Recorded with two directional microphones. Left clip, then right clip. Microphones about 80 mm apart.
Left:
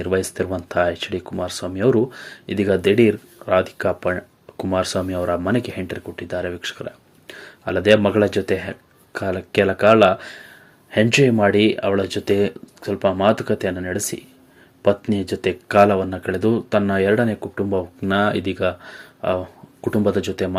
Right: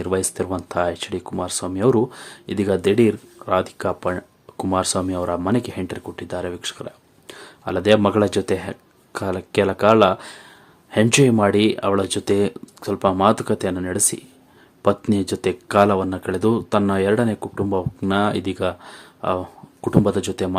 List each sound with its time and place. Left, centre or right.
0.0 s speech: right
11.0 s speech: right
11.3 s speech: right